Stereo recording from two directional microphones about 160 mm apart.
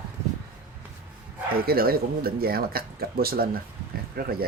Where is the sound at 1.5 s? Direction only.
70° right (ahead or behind).